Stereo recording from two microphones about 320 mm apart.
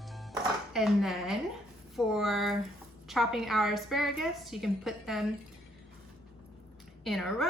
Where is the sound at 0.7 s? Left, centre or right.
Centre.